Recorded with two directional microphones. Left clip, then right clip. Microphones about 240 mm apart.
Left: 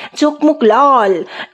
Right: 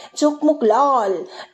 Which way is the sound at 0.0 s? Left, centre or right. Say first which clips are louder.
Left 5 dB; left.